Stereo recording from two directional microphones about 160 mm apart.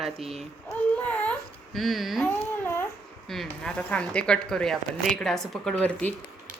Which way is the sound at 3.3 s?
5° left (ahead or behind).